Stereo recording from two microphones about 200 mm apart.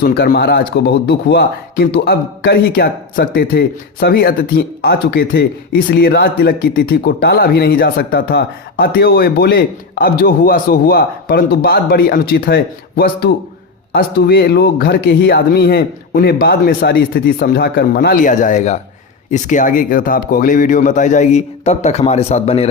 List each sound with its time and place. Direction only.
0.0 s a man's voice: 50° left (ahead or behind); by 22.6 s 30° left (ahead or behind)